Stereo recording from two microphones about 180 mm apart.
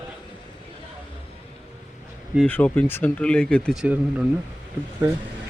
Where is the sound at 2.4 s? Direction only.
10° left (ahead or behind).